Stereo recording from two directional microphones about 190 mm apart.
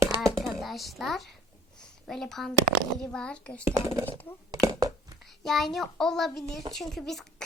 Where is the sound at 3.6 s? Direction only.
15° right (ahead or behind).